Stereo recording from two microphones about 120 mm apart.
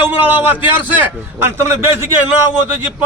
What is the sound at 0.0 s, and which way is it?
A man's voice, 15° right (ahead or behind).